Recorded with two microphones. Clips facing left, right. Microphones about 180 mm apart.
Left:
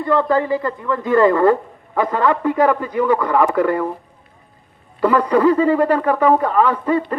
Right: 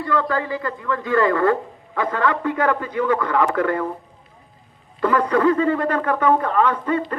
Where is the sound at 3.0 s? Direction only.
10° left (ahead or behind).